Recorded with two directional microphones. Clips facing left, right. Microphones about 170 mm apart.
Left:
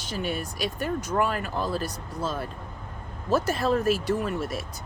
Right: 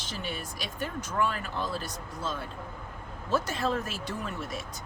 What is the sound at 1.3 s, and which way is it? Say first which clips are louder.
Speech: left 4 dB; 45° left (ahead or behind).